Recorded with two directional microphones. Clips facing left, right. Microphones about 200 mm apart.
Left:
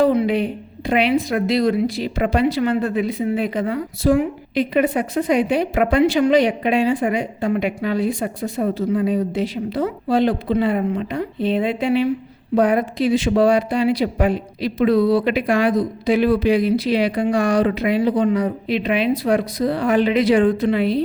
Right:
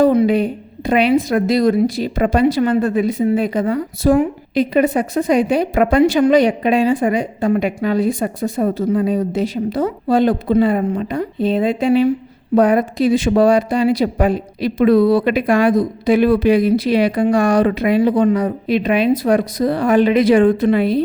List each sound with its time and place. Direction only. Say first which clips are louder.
0.0 s a woman's voice: right 4 dB; 45° right (ahead or behind)
14.8 s a woman's voice: right 4 dB; 55° right (ahead or behind)